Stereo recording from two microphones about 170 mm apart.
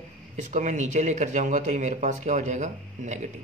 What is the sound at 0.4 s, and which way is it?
Speech, 45° right (ahead or behind).